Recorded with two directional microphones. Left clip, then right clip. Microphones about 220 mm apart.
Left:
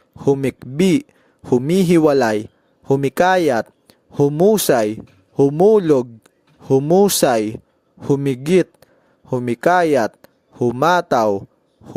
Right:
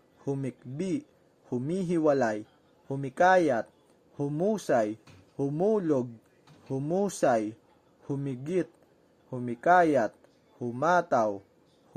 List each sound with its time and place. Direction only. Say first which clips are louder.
0.2 s speech: left 17 dB; 45° left (ahead or behind)